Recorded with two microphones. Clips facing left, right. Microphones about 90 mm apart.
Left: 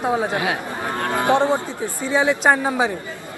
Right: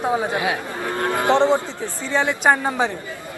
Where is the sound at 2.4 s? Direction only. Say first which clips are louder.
Left 1 dB; centre (ahead or behind).